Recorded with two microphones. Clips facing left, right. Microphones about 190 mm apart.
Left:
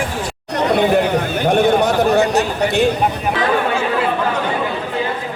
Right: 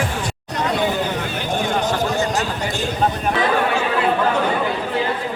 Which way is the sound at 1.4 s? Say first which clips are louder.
Left 8 dB; 65° left (ahead or behind).